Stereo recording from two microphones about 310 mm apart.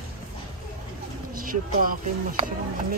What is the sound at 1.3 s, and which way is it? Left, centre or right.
Speech, right.